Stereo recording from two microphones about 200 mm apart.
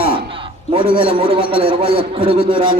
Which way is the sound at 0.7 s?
25° right (ahead or behind).